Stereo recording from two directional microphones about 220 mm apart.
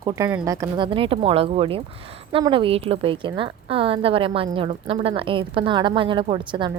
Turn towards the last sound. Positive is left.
turn(degrees=-20)  # may be behind; listen again after turning